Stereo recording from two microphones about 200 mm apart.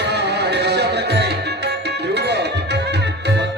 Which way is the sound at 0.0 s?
55° right (ahead or behind).